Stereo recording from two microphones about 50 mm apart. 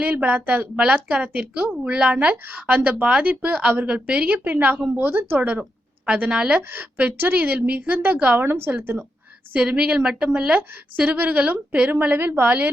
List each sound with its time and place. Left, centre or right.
0.0 s a woman's voice: right
0.8 s a woman's voice: right
2.3 s a woman's voice: right
4.9 s a woman's voice: right
5.4 s a woman's voice: right
7.3 s a woman's voice: right
8.1 s a woman's voice: right
8.4 s a woman's voice: right
9.5 s a woman's voice: right